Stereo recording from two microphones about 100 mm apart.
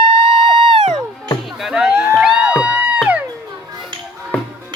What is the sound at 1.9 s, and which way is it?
Music, 25° right (ahead or behind).